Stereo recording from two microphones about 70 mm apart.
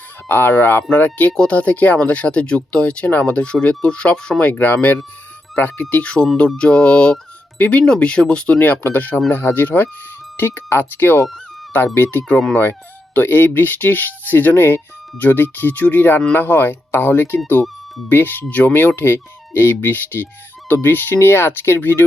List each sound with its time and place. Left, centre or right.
0.3 s speech: left; by 8.5 s centre
8.5 s speech: left